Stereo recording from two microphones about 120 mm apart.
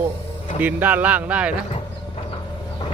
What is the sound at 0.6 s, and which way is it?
Speech, 15° right (ahead or behind).